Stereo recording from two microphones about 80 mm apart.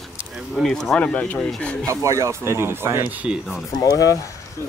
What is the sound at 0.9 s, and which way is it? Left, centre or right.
Speech, centre.